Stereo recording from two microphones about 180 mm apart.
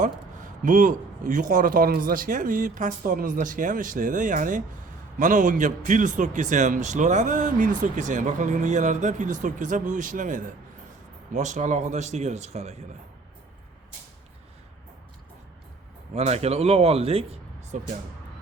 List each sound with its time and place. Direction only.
0.6 s a man's voice: 45° right (ahead or behind)
16.1 s a man's voice: 35° right (ahead or behind)